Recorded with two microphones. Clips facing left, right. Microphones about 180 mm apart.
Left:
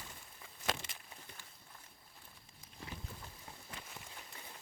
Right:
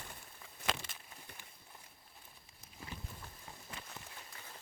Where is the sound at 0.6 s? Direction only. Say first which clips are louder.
Even; 60° right (ahead or behind).